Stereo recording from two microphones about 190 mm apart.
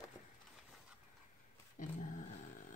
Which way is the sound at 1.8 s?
45° left (ahead or behind).